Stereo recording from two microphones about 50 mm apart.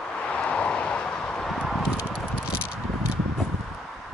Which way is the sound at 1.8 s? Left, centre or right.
Right.